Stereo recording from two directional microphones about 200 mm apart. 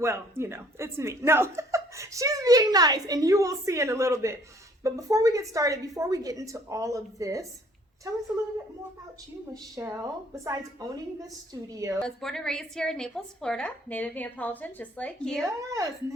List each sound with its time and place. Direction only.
0.0 s speech: 15° right (ahead or behind)
9.5 s speech: 15° right (ahead or behind)
12.0 s a woman's voice: 5° left (ahead or behind)
15.4 s speech: 15° right (ahead or behind)